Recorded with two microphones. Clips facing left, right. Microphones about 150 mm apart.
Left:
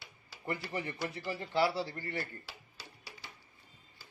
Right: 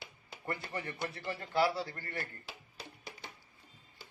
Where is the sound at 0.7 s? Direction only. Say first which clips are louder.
Left 2 dB; 15° left (ahead or behind).